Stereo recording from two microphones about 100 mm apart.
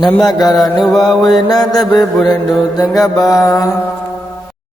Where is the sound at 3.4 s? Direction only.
35° left (ahead or behind).